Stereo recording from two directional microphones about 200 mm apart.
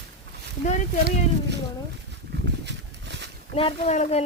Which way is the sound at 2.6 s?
60° right (ahead or behind).